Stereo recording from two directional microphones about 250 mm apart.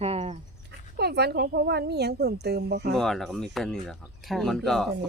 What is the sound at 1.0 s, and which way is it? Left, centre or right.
A woman's voice, right.